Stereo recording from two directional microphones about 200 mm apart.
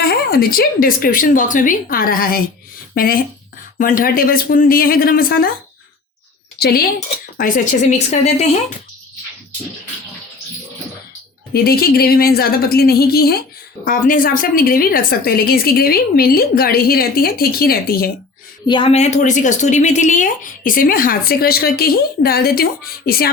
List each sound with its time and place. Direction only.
0.0 s speech: 50° left (ahead or behind)
6.6 s speech: 50° left (ahead or behind); by 8.4 s 35° left (ahead or behind)
11.5 s speech: 50° left (ahead or behind)
18.7 s speech: 30° left (ahead or behind); by 23.3 s 50° left (ahead or behind)